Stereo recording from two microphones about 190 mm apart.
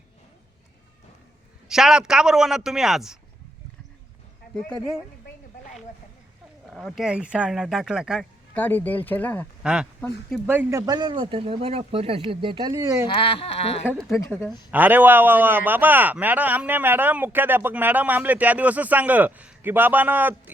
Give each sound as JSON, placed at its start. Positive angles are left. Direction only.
{"t": 1.6, "sound": "speech", "side_deg": -5}
{"t": 6.7, "sound": "speech", "side_deg": 0}
{"t": 8.5, "sound": "speech", "side_deg": 10}
{"t": 10.5, "sound": "speech", "side_deg": -10}
{"t": 13.1, "sound": "speech", "side_deg": 30}
{"t": 14.2, "sound": "speech", "side_deg": 10}
{"t": 14.7, "sound": "a man's voice", "side_deg": -10}